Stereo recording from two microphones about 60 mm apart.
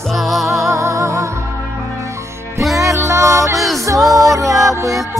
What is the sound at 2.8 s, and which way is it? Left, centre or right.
Music, right.